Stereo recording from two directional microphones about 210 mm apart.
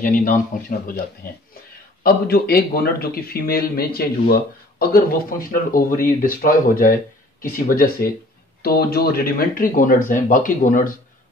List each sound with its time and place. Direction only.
0.0 s speech: 40° left (ahead or behind)